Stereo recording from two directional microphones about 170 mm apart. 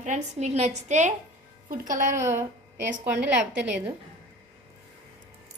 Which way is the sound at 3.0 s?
10° right (ahead or behind).